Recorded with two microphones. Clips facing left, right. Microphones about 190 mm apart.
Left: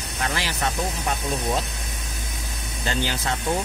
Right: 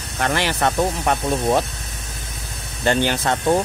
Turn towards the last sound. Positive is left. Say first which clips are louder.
# right 7 dB
turn(degrees=-60)  # may be behind; listen again after turning